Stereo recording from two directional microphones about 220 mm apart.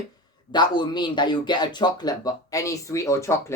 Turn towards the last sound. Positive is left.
turn(degrees=15)  # may be behind; listen again after turning